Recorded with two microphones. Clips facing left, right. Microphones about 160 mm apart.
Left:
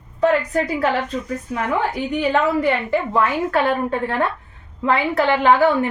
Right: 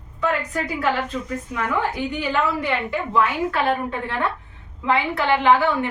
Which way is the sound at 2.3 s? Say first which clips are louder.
Left 5 dB; 40° left (ahead or behind).